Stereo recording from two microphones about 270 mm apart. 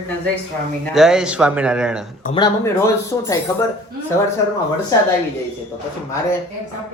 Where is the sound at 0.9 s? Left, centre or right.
Centre.